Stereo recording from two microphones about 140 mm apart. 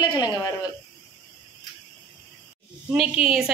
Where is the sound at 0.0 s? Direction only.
30° left (ahead or behind).